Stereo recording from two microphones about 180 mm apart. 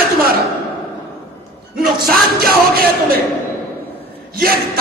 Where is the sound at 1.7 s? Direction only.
55° right (ahead or behind).